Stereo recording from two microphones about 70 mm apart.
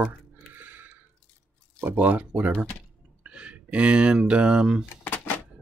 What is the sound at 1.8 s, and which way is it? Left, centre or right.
Speech, right.